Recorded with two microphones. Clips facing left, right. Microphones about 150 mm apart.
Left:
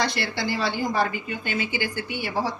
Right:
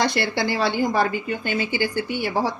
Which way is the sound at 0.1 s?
60° right (ahead or behind).